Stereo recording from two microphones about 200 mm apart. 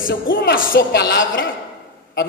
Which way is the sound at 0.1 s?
50° left (ahead or behind).